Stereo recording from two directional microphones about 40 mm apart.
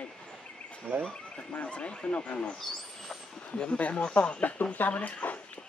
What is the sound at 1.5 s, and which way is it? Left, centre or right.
Speech, left.